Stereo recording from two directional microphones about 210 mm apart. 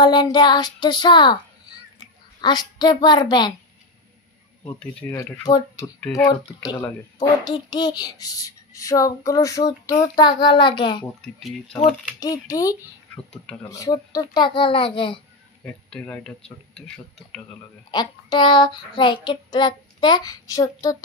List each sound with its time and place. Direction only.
0.0 s child singing: 20° left (ahead or behind)
5.1 s a child's voice: 15° left (ahead or behind)
12.2 s speech: 15° left (ahead or behind)
13.7 s child singing: 15° left (ahead or behind)
15.6 s speech: 5° left (ahead or behind)
17.9 s child singing: 20° left (ahead or behind)